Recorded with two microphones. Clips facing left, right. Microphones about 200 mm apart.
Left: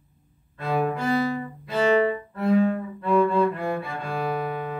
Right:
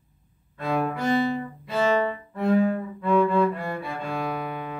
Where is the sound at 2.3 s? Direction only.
Centre (ahead or behind).